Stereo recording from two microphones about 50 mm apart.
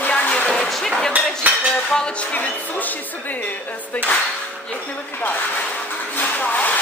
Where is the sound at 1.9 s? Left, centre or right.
Left.